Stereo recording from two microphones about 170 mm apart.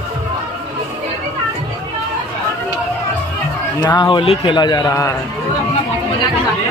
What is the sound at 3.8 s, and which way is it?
A man's voice, 25° left (ahead or behind).